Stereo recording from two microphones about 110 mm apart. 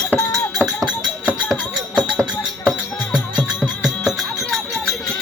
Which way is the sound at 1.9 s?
5° right (ahead or behind).